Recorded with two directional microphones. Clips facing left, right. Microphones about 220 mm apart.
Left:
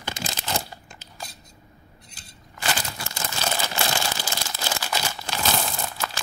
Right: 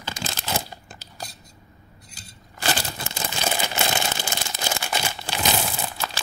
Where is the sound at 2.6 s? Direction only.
35° right (ahead or behind).